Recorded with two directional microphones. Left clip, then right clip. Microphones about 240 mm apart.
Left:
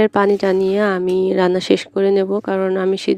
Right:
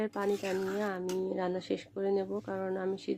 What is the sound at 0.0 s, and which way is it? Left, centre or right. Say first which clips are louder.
Speech: left 18 dB; left.